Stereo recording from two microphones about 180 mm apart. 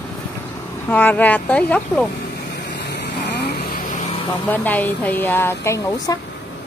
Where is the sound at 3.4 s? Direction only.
65° left (ahead or behind).